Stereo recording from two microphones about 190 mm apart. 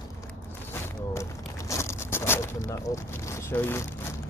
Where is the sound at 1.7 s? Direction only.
15° left (ahead or behind).